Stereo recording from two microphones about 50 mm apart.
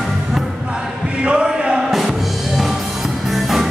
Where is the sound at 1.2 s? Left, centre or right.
Centre.